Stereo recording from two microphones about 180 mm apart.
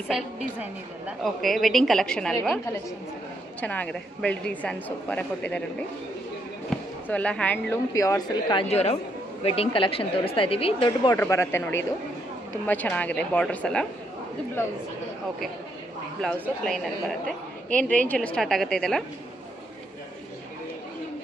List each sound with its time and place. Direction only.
0.1 s a woman's voice: 5° right (ahead or behind)
3.6 s a woman's voice: 10° left (ahead or behind)
6.7 s a sound: 5° left (ahead or behind)
7.1 s a woman's voice: 5° left (ahead or behind); by 11.1 s 30° left (ahead or behind)
11.1 s a woman's voice: 15° left (ahead or behind)
17.6 s a woman's voice: 10° left (ahead or behind)